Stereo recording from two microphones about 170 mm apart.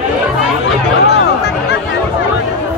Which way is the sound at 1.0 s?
90° left.